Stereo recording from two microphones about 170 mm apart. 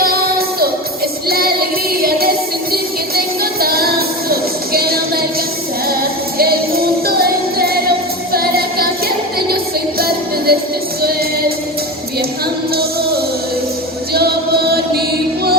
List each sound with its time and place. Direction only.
0.0 s music: 65° right (ahead or behind)
6.4 s music: 65° right (ahead or behind)